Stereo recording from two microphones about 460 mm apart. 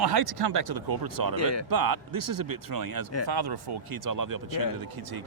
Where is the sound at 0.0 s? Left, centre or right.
Right.